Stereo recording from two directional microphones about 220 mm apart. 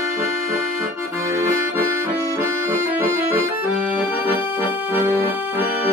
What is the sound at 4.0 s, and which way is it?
Accordion, 10° right (ahead or behind).